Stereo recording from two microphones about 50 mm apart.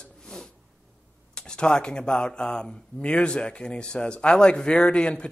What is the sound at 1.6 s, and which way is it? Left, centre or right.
Speech, centre.